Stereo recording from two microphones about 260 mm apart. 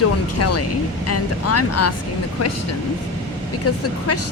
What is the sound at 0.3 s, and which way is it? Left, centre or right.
Speech, left.